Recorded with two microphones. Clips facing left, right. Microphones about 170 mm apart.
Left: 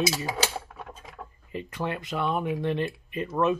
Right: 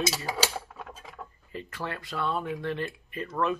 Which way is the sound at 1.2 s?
20° left (ahead or behind).